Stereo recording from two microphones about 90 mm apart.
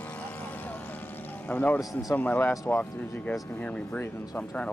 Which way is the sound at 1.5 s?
15° left (ahead or behind).